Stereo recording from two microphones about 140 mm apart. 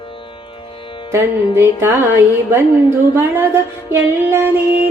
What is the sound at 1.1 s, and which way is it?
Music, 20° right (ahead or behind).